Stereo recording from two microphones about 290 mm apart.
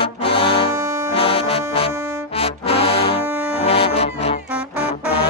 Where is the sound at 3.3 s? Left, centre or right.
Centre.